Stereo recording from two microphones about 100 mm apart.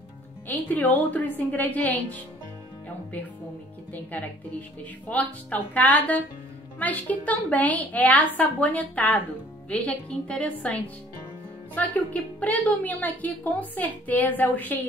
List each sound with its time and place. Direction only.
0.5 s a woman's voice: 15° left (ahead or behind)
3.9 s a woman's voice: 15° left (ahead or behind)